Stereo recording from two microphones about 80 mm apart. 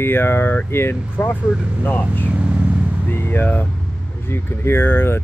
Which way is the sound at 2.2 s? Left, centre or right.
Centre.